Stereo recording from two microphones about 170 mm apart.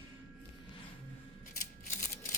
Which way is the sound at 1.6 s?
50° left (ahead or behind).